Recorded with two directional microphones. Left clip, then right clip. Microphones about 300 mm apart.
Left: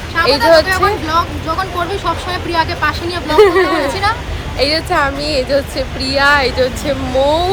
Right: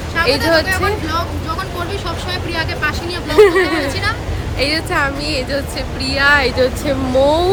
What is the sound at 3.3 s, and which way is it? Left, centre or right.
Speech, centre.